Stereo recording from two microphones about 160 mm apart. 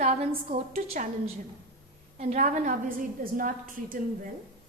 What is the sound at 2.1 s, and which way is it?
A woman's voice, 45° right (ahead or behind).